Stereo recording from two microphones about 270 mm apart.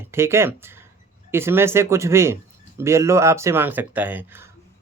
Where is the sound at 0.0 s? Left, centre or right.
Centre.